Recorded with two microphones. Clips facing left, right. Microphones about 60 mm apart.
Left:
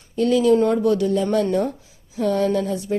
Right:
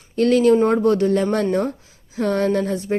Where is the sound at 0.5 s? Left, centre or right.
Right.